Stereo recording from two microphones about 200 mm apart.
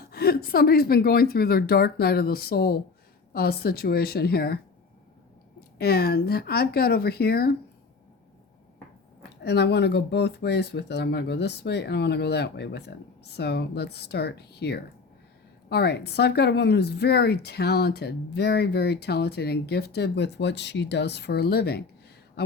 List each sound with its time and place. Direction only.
0.0 s a woman's voice: 50° left (ahead or behind)
9.4 s speech: 55° left (ahead or behind)